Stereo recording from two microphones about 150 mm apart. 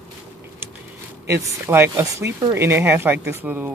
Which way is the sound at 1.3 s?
15° right (ahead or behind).